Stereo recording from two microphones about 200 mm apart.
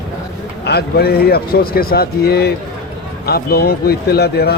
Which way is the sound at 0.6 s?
55° left (ahead or behind).